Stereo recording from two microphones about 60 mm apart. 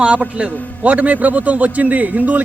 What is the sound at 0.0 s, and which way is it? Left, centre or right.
A man's voice, centre.